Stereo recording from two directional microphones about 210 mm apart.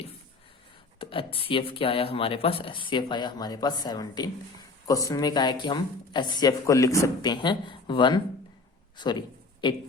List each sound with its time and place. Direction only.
0.9 s a man's voice: 25° left (ahead or behind)